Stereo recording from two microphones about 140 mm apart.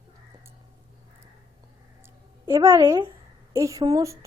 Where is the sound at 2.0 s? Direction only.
25° right (ahead or behind).